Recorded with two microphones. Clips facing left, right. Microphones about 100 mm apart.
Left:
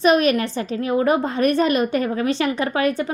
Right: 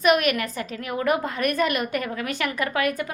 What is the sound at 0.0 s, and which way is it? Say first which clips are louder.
A woman's voice: left 4 dB; 30° left (ahead or behind).